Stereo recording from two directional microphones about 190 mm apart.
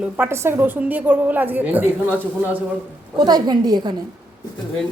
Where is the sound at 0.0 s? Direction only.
10° right (ahead or behind).